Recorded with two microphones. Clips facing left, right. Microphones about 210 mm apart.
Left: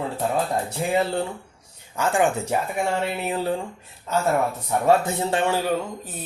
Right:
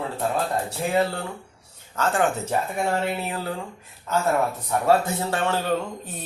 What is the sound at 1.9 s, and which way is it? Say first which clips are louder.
Speech: left 2 dB; 15° left (ahead or behind).